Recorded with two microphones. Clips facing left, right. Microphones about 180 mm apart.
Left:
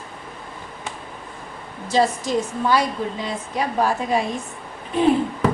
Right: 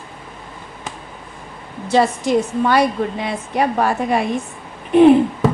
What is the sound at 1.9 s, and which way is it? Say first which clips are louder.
A woman's voice: right 4 dB; 60° right (ahead or behind).